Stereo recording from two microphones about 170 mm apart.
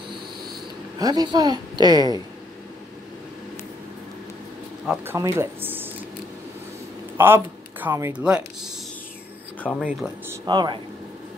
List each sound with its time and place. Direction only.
0.9 s a woman's voice: 20° right (ahead or behind)
5.0 s speech: 15° right (ahead or behind)
7.2 s speech: 15° right (ahead or behind)
9.6 s speech: 5° left (ahead or behind)
9.8 s speech: 10° right (ahead or behind)
10.4 s a woman's voice: 25° right (ahead or behind)